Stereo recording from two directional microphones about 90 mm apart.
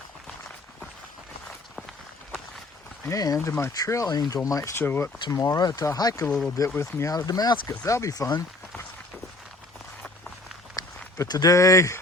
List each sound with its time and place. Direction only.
3.1 s speech: 40° left (ahead or behind)
4.8 s speech: 25° left (ahead or behind)
5.3 s speech: 40° left (ahead or behind)
6.2 s speech: 10° left (ahead or behind)
6.7 s speech: 30° left (ahead or behind)
7.1 s speech: 45° left (ahead or behind)
7.9 s speech: 35° left (ahead or behind)
10.8 s speech: 45° left (ahead or behind)